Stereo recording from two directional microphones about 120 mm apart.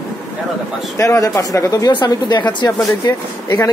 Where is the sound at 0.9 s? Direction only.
25° left (ahead or behind).